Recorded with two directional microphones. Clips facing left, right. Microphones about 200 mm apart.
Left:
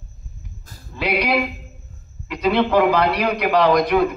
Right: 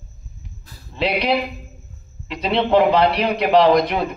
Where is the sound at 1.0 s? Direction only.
25° right (ahead or behind).